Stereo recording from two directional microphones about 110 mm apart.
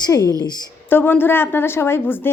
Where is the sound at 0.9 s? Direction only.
20° left (ahead or behind).